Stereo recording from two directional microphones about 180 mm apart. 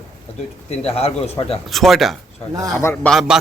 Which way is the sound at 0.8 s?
35° left (ahead or behind).